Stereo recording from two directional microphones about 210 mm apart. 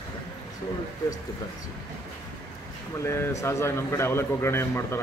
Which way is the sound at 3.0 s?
15° left (ahead or behind).